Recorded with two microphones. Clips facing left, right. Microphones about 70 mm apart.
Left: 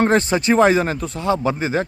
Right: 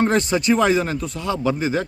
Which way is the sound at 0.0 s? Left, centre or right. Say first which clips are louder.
Left 2 dB; left.